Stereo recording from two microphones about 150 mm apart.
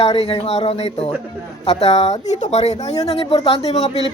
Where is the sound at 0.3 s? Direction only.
45° left (ahead or behind).